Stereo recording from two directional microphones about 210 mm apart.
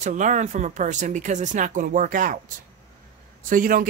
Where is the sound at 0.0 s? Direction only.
35° right (ahead or behind).